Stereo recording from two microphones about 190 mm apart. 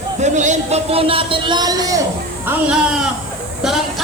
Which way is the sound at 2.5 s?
5° right (ahead or behind).